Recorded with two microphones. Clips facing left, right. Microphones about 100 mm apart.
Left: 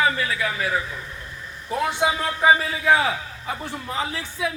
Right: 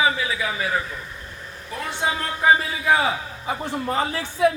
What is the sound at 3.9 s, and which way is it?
Music, 45° right (ahead or behind).